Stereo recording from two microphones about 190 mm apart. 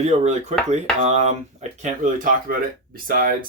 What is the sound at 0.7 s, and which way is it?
Speech, 35° right (ahead or behind).